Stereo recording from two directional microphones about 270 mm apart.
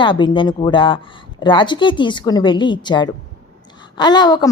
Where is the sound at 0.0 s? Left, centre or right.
Centre.